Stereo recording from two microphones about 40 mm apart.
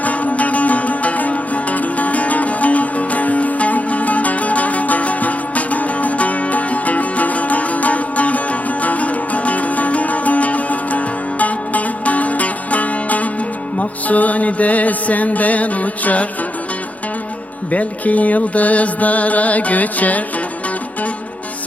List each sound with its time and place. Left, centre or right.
0.0 s music: left
17.7 s music: left